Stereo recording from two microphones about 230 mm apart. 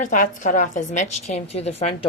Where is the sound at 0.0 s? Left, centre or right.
Left.